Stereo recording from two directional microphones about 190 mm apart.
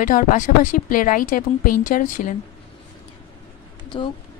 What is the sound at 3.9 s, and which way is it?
Speech, 25° left (ahead or behind).